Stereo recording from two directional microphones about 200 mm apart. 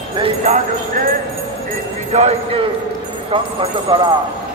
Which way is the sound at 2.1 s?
30° right (ahead or behind).